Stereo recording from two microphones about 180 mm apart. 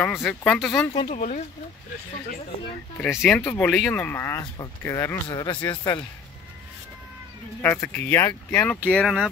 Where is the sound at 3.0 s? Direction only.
Centre (ahead or behind); by 6.0 s 25° left (ahead or behind).